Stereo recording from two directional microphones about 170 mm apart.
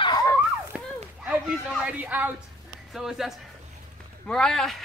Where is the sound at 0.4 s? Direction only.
10° right (ahead or behind).